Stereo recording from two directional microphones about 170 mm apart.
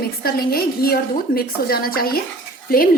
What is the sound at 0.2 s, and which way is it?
A woman's voice, 60° left (ahead or behind).